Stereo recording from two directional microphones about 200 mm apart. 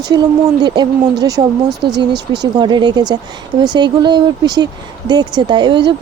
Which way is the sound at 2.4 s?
20° right (ahead or behind).